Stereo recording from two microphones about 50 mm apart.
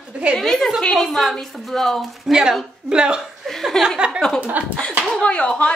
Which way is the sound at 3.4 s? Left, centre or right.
Centre.